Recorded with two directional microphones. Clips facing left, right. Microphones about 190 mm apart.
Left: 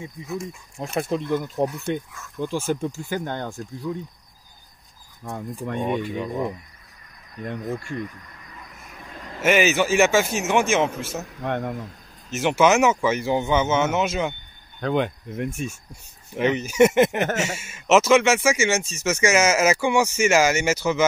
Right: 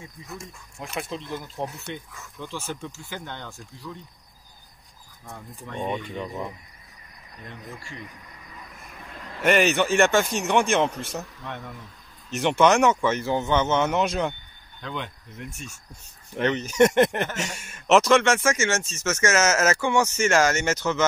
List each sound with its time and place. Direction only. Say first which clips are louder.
0.7 s speech: left 6 dB; 35° left (ahead or behind)
1.0 s speech: left 9 dB; 55° left (ahead or behind)
5.2 s speech: left 10 dB; 55° left (ahead or behind)
5.8 s speech: left 3 dB; 10° left (ahead or behind)
7.4 s speech: left 12 dB; 55° left (ahead or behind)
9.4 s speech: left 1 dB; 5° left (ahead or behind)
11.3 s speech: left 10 dB; 55° left (ahead or behind)
12.3 s speech: left 1 dB; 5° left (ahead or behind)
14.8 s speech: left 11 dB; 55° left (ahead or behind)
16.3 s speech: left 2 dB; 10° left (ahead or behind)